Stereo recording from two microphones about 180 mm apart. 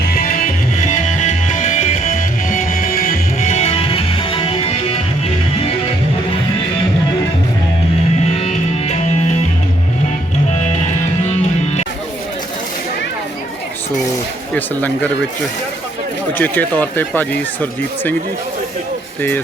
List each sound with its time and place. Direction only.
0.0 s music: 55° left (ahead or behind); by 4.8 s 30° left (ahead or behind)
10.5 s music: 40° left (ahead or behind)
14.5 s speech: 10° left (ahead or behind)
16.4 s speech: 10° left (ahead or behind)